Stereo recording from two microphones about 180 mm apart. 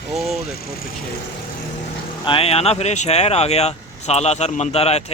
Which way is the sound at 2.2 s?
30° left (ahead or behind).